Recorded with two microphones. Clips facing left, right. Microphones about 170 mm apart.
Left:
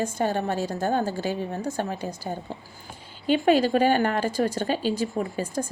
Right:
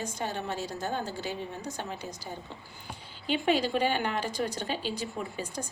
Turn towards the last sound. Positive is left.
turn(degrees=45)  # may be behind; listen again after turning